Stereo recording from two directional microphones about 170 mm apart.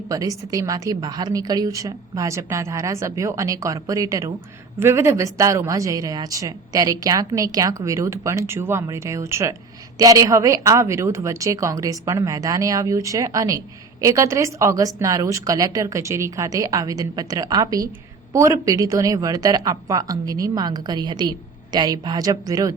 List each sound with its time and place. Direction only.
0.1 s a woman's voice: 20° right (ahead or behind)